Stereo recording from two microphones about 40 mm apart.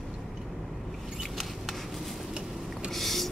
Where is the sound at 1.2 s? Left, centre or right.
Centre.